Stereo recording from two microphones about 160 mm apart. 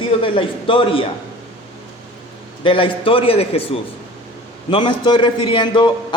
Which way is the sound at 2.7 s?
35° left (ahead or behind).